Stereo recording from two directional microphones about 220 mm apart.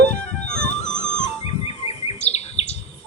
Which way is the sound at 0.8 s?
30° left (ahead or behind).